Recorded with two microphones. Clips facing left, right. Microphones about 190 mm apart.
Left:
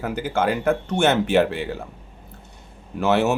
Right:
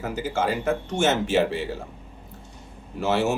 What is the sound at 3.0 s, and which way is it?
Speech, 65° left (ahead or behind).